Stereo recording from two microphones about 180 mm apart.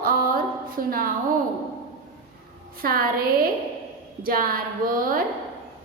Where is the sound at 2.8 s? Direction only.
55° right (ahead or behind).